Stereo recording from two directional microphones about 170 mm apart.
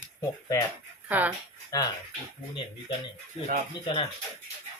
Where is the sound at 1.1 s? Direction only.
10° right (ahead or behind).